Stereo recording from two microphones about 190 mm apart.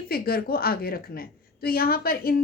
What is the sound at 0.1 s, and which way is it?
A woman's voice, 55° left (ahead or behind).